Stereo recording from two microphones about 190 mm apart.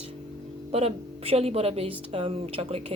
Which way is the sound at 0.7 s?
30° right (ahead or behind).